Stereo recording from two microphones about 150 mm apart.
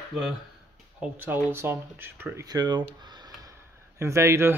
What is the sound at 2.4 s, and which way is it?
Speech, 25° right (ahead or behind).